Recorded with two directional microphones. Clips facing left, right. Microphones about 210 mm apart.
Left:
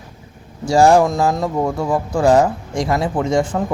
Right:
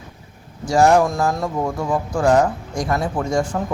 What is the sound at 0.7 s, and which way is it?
Speech, 30° left (ahead or behind).